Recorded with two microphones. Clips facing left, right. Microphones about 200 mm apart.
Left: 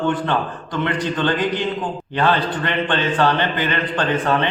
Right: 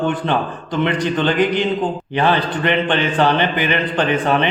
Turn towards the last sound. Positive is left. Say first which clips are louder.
# right 2 dB
turn(degrees=-15)  # may be behind; listen again after turning